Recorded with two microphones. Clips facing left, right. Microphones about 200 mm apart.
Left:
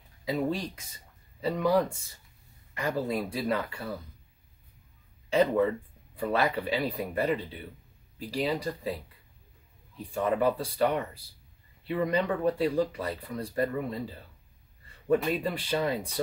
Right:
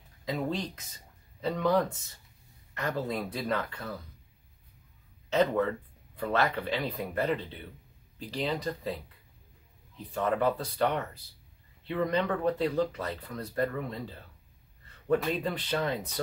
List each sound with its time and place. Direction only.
0.2 s speech: 10° left (ahead or behind)
5.3 s speech: 10° left (ahead or behind)
9.9 s speech: 10° left (ahead or behind)